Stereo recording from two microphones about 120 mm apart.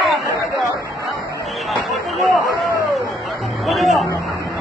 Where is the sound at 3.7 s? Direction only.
Centre (ahead or behind).